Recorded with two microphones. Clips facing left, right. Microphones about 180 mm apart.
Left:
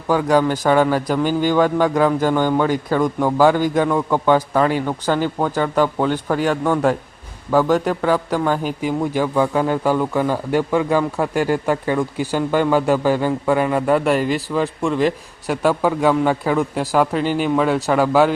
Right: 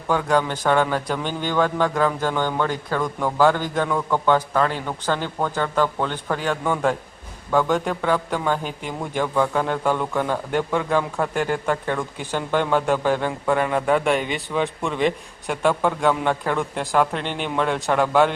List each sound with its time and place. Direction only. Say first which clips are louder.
0.1 s a man's voice: left 5 dB; 5° left (ahead or behind)